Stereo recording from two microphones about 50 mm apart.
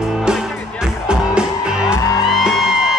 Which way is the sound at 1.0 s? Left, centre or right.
Centre.